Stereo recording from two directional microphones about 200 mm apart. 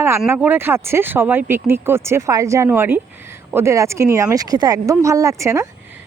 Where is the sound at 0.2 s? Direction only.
5° right (ahead or behind).